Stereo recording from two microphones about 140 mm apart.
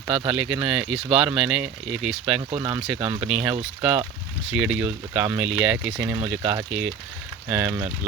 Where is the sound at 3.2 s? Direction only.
10° right (ahead or behind).